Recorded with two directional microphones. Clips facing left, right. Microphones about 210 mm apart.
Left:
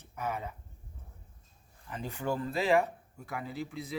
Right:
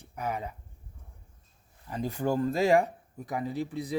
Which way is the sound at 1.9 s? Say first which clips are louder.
Right 5 dB; 40° right (ahead or behind).